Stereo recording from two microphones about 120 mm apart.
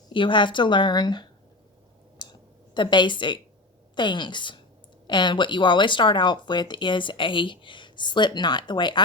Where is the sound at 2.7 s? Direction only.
40° left (ahead or behind).